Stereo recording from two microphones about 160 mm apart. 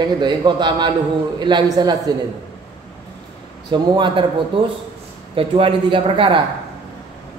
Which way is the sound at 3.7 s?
30° right (ahead or behind).